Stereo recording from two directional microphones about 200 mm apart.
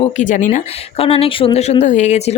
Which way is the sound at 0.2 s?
40° left (ahead or behind).